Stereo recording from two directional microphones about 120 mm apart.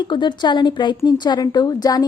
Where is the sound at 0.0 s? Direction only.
40° left (ahead or behind).